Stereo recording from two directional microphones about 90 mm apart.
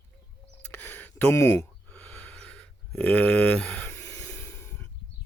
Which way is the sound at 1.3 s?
30° left (ahead or behind).